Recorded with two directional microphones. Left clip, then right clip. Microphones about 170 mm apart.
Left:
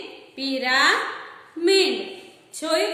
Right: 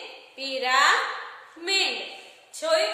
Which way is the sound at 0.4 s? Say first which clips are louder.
Left 1 dB; 15° left (ahead or behind).